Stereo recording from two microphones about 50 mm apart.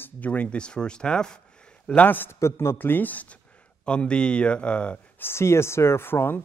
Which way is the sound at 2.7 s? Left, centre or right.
Left.